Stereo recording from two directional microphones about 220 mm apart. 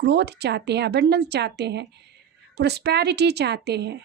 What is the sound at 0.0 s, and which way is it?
A woman's voice, 50° right (ahead or behind).